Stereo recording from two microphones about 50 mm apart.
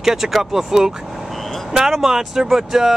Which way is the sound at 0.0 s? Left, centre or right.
Centre.